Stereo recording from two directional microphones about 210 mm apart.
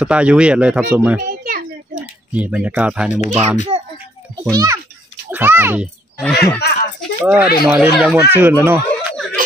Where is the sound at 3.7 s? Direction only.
30° right (ahead or behind).